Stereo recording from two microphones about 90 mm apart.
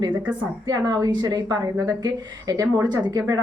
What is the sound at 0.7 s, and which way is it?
A woman's voice, 45° right (ahead or behind).